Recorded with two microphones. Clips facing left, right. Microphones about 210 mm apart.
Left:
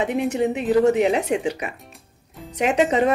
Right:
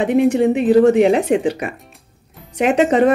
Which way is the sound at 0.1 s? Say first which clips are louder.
Right 8 dB; 55° right (ahead or behind).